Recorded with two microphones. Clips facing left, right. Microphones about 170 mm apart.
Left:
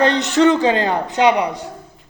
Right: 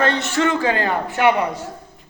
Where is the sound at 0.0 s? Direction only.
20° left (ahead or behind).